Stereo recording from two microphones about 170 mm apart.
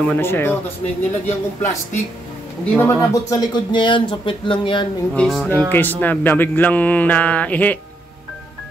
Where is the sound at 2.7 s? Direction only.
15° left (ahead or behind).